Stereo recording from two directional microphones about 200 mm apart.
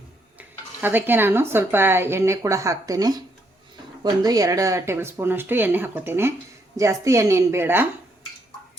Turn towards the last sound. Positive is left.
turn(degrees=-10)  # may be behind; listen again after turning